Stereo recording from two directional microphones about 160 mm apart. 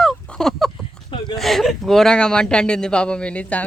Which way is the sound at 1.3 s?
Centre (ahead or behind).